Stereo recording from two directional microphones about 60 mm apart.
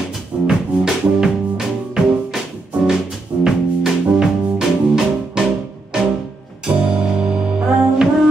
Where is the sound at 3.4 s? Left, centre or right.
Centre.